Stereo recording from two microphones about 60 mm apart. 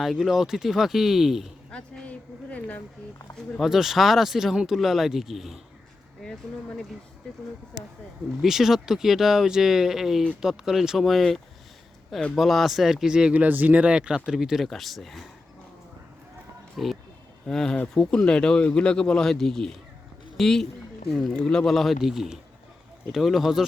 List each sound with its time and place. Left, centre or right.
0.0 s speech: centre
1.7 s a woman's voice: left
3.6 s speech: centre
6.2 s speech: centre
8.4 s speech: centre
13.3 s speech: right
14.3 s speech: centre
16.7 s speech: centre
17.4 s speech: centre